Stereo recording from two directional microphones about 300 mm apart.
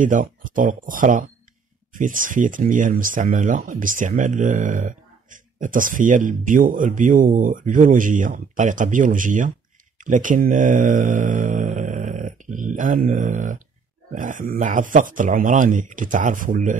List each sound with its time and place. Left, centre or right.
0.0 s speech: right